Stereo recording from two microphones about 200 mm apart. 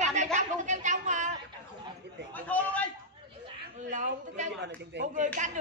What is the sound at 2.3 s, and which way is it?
Chatter, 10° left (ahead or behind).